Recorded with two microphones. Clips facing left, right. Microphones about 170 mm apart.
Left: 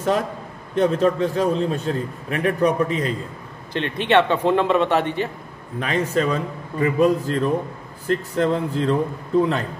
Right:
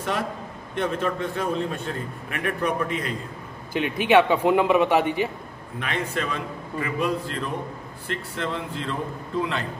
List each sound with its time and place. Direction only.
0.7 s a man's voice: 35° left (ahead or behind)
3.7 s a man's voice: 5° right (ahead or behind)
5.8 s a man's voice: 40° left (ahead or behind)